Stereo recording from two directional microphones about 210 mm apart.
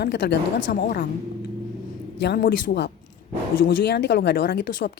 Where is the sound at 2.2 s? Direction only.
50° left (ahead or behind).